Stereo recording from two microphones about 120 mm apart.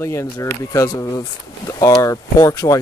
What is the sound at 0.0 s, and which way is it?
Speech, 25° left (ahead or behind).